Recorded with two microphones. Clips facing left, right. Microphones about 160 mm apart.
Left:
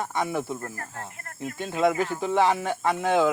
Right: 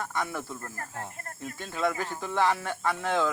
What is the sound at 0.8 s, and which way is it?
Speech, 20° right (ahead or behind).